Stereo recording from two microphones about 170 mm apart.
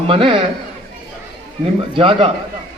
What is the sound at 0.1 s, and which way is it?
Speech, 30° right (ahead or behind).